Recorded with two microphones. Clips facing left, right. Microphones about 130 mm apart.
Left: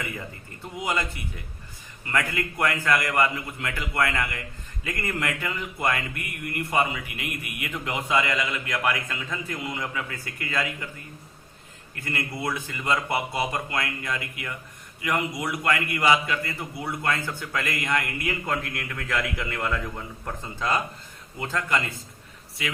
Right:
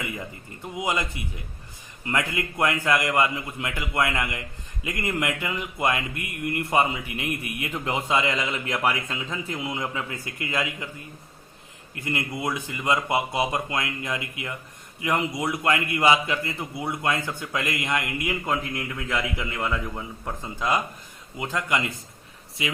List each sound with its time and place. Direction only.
0.8 s speech: 20° right (ahead or behind)
11.9 s a man's voice: 20° right (ahead or behind)